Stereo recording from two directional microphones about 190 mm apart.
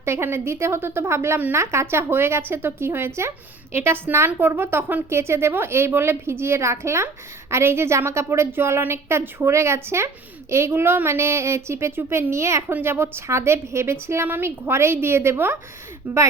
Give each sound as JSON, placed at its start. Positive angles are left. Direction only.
{"t": 0.0, "sound": "a woman's voice", "side_deg": -15}